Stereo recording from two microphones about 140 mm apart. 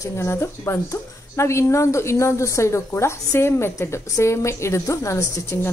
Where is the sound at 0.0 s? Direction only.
20° left (ahead or behind).